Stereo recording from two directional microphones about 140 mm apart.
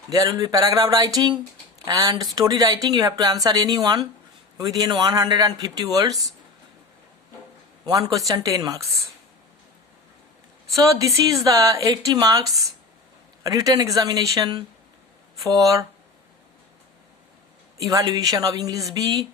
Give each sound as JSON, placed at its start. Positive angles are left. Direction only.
{"t": 0.1, "sound": "speech", "side_deg": -25}
{"t": 7.9, "sound": "speech", "side_deg": -25}
{"t": 10.8, "sound": "speech", "side_deg": -25}
{"t": 17.8, "sound": "speech", "side_deg": -25}